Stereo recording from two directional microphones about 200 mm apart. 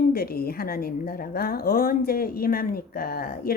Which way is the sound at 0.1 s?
50° left (ahead or behind).